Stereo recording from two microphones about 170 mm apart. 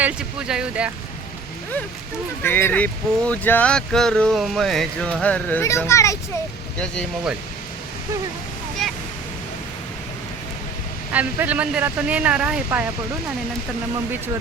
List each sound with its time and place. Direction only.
0.0 s speech: 5° right (ahead or behind)
2.4 s speech: 15° left (ahead or behind)
6.7 s speech: 5° left (ahead or behind)
11.1 s speech: 10° right (ahead or behind)